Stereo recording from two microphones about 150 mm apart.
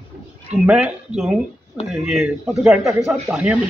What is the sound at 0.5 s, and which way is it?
A man's voice, 10° right (ahead or behind).